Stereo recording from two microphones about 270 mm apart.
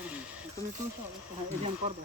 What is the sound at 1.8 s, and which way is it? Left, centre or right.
Speech, right.